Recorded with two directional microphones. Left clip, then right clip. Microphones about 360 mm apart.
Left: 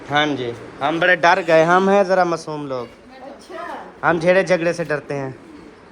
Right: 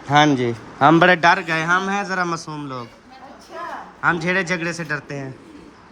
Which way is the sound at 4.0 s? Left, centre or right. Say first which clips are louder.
Left 4 dB; centre.